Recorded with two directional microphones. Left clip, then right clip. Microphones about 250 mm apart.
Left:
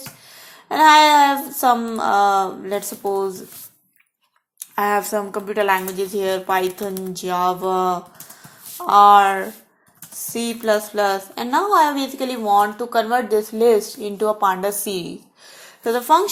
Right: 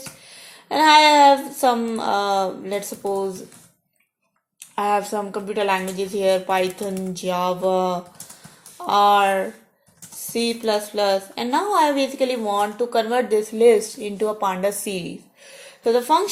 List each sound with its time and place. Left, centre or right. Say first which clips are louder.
0.7 s speech: left 2 dB; left
4.6 s a woman's voice: left 1 dB; left
10.3 s a woman's voice: left 2 dB; left